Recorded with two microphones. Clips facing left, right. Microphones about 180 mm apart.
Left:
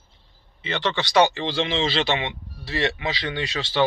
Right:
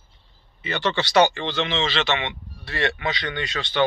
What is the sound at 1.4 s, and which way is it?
Speech, 35° left (ahead or behind).